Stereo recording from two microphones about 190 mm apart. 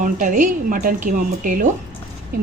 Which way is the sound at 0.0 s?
40° right (ahead or behind).